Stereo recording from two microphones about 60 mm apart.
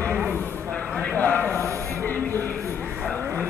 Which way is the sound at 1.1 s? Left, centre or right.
Left.